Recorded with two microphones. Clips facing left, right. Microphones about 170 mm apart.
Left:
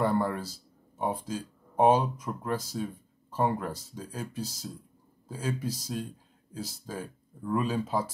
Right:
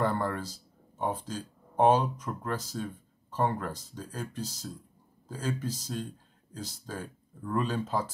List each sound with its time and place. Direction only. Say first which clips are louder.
0.0 s speech: left 2 dB; 10° left (ahead or behind)